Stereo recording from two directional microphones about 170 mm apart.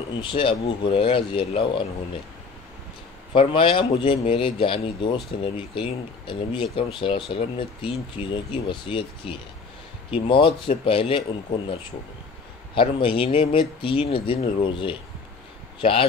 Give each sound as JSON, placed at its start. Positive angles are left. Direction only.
{"t": 0.2, "sound": "speech", "side_deg": 30}
{"t": 3.3, "sound": "speech", "side_deg": 30}
{"t": 12.7, "sound": "speech", "side_deg": 30}